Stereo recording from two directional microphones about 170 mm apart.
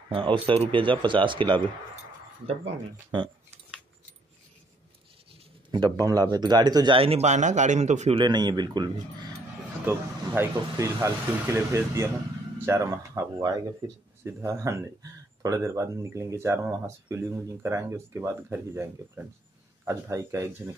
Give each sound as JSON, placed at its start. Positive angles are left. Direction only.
{"t": 0.1, "sound": "speech", "side_deg": -30}
{"t": 3.1, "sound": "speech", "side_deg": -30}
{"t": 5.7, "sound": "speech", "side_deg": -25}
{"t": 8.2, "sound": "speech", "side_deg": -25}
{"t": 9.8, "sound": "speech", "side_deg": -15}